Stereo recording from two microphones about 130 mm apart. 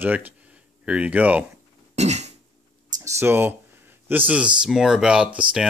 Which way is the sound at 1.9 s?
60° right (ahead or behind).